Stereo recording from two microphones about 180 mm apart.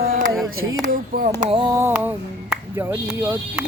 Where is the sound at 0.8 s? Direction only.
50° right (ahead or behind).